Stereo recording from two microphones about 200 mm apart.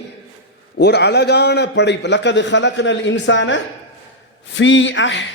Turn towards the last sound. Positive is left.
turn(degrees=65)  # may be behind; listen again after turning